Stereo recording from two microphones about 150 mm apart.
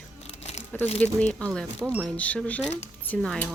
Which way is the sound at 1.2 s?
5° left (ahead or behind).